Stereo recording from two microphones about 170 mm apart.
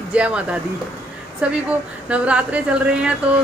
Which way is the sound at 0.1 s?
5° right (ahead or behind).